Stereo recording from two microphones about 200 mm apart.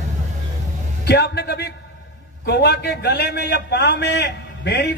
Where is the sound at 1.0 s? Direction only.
55° left (ahead or behind).